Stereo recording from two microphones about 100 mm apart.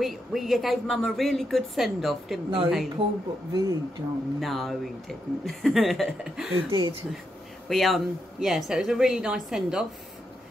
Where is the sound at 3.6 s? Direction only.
35° right (ahead or behind).